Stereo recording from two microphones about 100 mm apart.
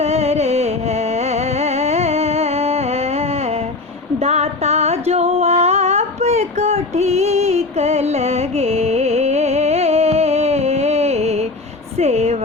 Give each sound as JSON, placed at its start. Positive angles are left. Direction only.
{"t": 0.0, "sound": "music", "side_deg": -90}
{"t": 4.2, "sound": "a sound", "side_deg": -90}
{"t": 11.9, "sound": "vehicle", "side_deg": -90}